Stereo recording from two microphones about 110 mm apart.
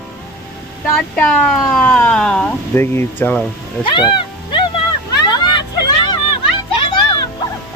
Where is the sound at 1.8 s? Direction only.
15° left (ahead or behind).